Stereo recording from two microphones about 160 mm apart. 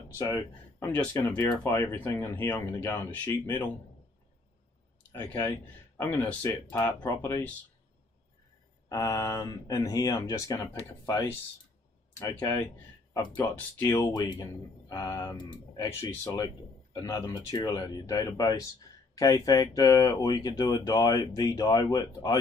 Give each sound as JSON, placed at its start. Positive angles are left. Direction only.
{"t": 0.1, "sound": "speech", "side_deg": 20}
{"t": 6.0, "sound": "speech", "side_deg": 10}
{"t": 6.7, "sound": "speech", "side_deg": 20}
{"t": 8.8, "sound": "speech", "side_deg": 20}
{"t": 12.1, "sound": "speech", "side_deg": 20}